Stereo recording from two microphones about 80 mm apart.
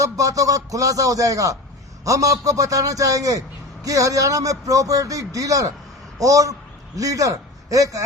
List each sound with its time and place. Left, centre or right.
0.0 s a man's voice: right